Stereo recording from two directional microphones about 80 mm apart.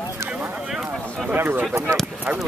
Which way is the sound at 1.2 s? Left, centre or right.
Right.